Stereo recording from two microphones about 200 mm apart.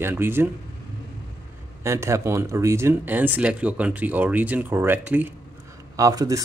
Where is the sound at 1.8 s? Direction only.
15° right (ahead or behind).